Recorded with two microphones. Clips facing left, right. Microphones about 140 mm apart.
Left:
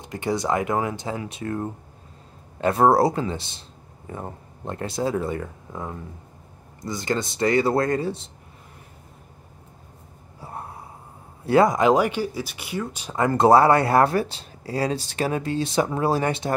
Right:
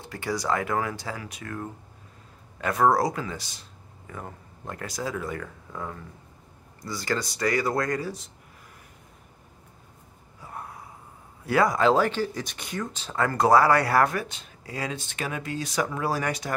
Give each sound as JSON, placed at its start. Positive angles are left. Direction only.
{"t": 0.0, "sound": "speech", "side_deg": 20}
{"t": 10.4, "sound": "gasp", "side_deg": 30}
{"t": 11.4, "sound": "speech", "side_deg": 25}